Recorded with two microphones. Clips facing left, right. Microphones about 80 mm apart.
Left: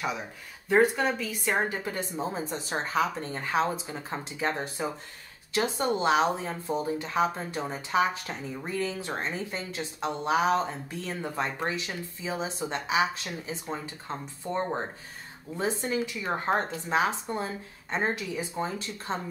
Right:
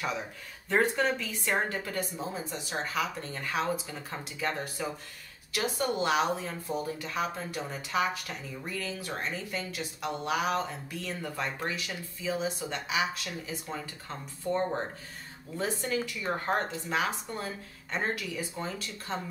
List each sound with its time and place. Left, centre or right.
0.7 s speech: centre; by 19.1 s left